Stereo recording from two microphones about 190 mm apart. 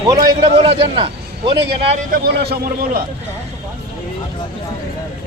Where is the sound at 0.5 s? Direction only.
30° right (ahead or behind).